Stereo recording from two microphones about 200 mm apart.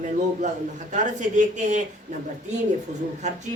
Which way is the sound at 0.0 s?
35° right (ahead or behind).